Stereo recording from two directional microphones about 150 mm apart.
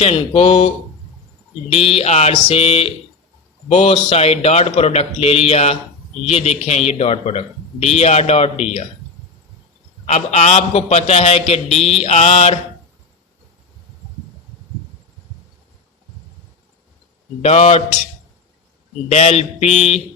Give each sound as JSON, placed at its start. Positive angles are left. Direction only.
{"t": 0.0, "sound": "mantra", "side_deg": 40}
{"t": 1.7, "sound": "mantra", "side_deg": 40}
{"t": 3.7, "sound": "speech", "side_deg": 45}
{"t": 10.1, "sound": "speech", "side_deg": 45}
{"t": 17.4, "sound": "speech", "side_deg": 45}
{"t": 19.0, "sound": "speech", "side_deg": 45}